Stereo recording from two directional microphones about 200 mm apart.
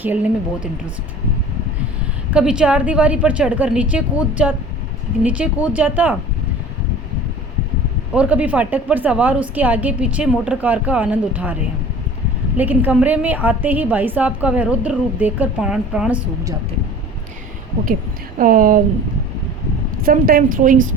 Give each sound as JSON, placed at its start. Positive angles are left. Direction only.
{"t": 0.0, "sound": "a woman's voice", "side_deg": -10}
{"t": 2.3, "sound": "a woman's voice", "side_deg": -5}
{"t": 8.1, "sound": "a woman's voice", "side_deg": -5}
{"t": 12.5, "sound": "a woman's voice", "side_deg": -10}
{"t": 18.3, "sound": "a woman's voice", "side_deg": -45}
{"t": 20.1, "sound": "a woman's voice", "side_deg": -45}